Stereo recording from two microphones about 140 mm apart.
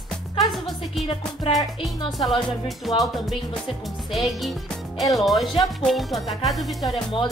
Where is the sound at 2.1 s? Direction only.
Centre (ahead or behind).